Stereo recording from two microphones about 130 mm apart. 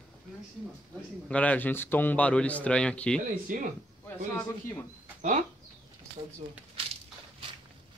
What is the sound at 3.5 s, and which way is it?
Speech, 90° right.